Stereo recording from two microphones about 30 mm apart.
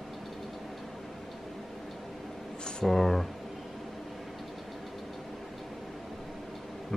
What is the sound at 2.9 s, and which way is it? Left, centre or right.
Speech, centre.